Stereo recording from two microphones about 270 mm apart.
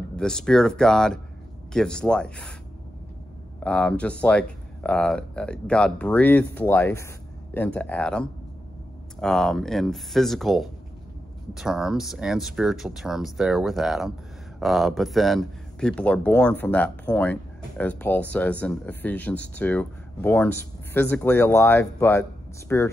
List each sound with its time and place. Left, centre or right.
0.1 s speech: centre
3.6 s speech: centre